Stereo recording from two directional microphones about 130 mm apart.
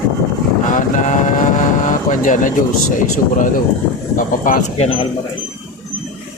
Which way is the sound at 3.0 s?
85° left.